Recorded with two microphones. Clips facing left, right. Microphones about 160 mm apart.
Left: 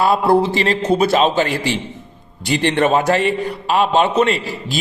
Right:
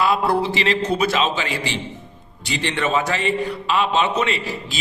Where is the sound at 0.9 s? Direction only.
30° left (ahead or behind).